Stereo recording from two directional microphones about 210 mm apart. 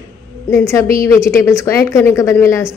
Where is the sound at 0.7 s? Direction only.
15° left (ahead or behind).